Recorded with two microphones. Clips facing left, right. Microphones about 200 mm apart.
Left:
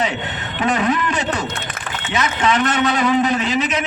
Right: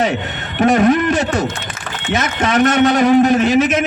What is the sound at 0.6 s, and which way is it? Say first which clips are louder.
A man's voice: right 7 dB; 45° right (ahead or behind).